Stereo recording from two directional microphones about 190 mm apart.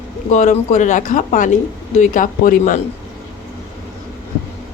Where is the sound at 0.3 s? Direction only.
40° left (ahead or behind).